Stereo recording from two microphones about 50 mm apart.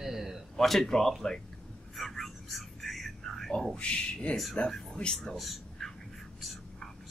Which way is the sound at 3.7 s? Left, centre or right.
Left.